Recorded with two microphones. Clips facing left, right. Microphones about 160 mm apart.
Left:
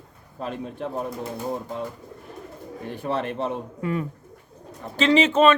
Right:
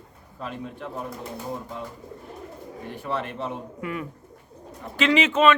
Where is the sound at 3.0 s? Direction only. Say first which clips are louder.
Left 4 dB; 30° left (ahead or behind).